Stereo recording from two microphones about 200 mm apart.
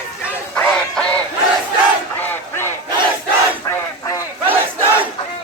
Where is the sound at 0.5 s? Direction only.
5° left (ahead or behind).